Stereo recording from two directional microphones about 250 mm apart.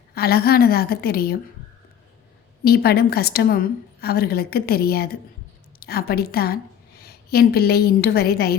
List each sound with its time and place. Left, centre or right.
0.1 s a woman's voice: left
2.6 s a woman's voice: left